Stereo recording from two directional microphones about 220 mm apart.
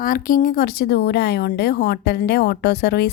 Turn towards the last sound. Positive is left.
turn(degrees=45)  # may be behind; listen again after turning